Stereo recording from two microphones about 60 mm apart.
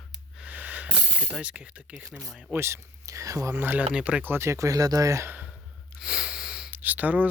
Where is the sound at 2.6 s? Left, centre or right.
Right.